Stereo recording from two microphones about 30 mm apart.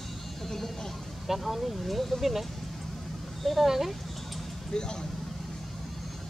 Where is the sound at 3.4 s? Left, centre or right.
Centre.